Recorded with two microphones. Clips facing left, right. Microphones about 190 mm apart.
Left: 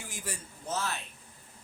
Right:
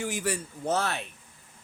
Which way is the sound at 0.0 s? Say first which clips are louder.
Right 11 dB; 70° right (ahead or behind).